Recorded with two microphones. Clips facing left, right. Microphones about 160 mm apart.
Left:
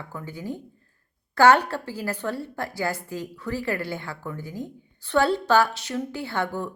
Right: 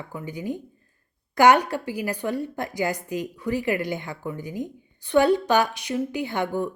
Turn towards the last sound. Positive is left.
turn(degrees=-15)  # may be behind; listen again after turning